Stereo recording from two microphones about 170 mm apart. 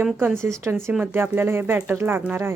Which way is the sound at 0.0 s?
5° right (ahead or behind).